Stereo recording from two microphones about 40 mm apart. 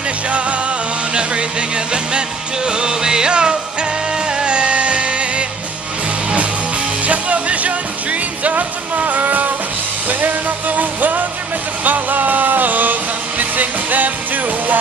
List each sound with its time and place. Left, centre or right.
1.9 s music: right
7.1 s music: right